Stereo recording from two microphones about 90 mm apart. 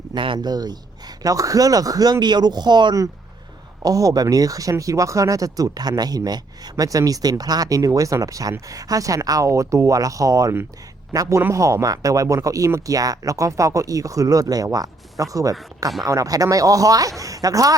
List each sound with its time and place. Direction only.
0.1 s a sound: 65° right (ahead or behind)
0.3 s speech: 45° right (ahead or behind)
3.8 s speech: 40° right (ahead or behind)